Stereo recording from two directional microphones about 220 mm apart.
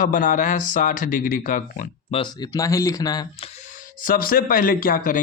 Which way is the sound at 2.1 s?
20° left (ahead or behind).